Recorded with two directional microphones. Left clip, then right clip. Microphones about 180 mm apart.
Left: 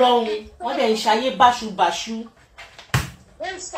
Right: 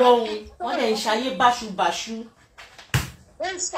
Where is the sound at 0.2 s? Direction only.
30° right (ahead or behind).